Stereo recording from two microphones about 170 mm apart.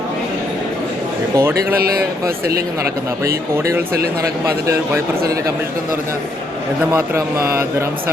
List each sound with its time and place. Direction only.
1.4 s speech: 15° right (ahead or behind)
1.8 s speech: 65° right (ahead or behind)
3.2 s speech: 15° right (ahead or behind)
6.9 s speech: 15° right (ahead or behind)